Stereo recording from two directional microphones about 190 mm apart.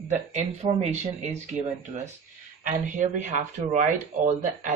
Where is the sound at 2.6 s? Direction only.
40° right (ahead or behind).